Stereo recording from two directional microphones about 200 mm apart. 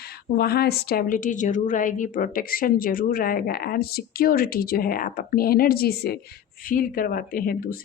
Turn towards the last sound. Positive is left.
turn(degrees=45)  # may be behind; listen again after turning